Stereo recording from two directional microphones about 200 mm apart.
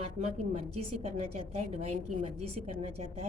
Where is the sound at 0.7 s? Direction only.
30° right (ahead or behind).